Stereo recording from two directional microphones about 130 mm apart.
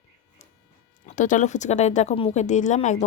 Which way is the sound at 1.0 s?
70° left (ahead or behind).